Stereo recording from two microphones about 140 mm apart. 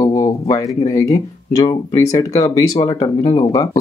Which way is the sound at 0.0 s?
25° left (ahead or behind).